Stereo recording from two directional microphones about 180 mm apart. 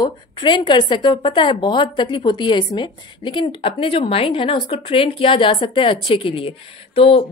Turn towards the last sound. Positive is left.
turn(degrees=30)  # may be behind; listen again after turning